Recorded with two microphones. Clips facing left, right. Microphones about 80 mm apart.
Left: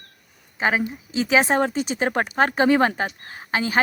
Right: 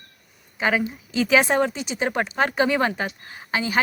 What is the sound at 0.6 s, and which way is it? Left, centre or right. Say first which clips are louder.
A woman's voice: even; left.